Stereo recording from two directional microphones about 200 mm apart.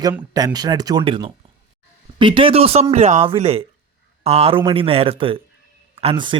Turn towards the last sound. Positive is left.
turn(degrees=-25)  # may be behind; listen again after turning